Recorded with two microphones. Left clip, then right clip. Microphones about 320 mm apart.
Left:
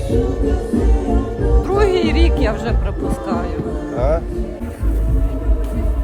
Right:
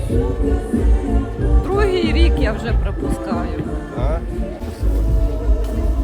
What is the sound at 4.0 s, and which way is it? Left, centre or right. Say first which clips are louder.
Music: left 8 dB; left.